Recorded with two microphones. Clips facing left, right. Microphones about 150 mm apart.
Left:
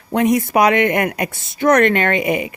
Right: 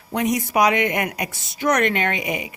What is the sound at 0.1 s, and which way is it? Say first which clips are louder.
A woman's voice: left 6 dB; 55° left (ahead or behind).